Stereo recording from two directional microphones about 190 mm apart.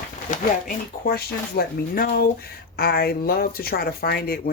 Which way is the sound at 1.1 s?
55° left (ahead or behind).